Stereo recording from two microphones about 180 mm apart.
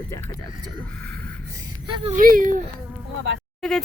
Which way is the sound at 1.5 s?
25° right (ahead or behind).